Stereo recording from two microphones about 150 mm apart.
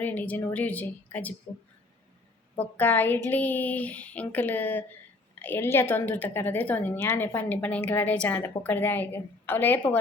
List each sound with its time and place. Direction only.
0.0 s a woman's voice: 10° left (ahead or behind)
2.6 s a woman's voice: 10° left (ahead or behind)